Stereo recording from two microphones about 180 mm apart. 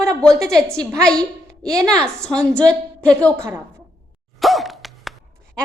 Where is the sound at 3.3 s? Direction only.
15° right (ahead or behind).